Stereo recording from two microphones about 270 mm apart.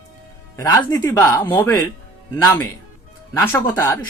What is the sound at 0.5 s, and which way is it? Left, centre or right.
Speech, centre.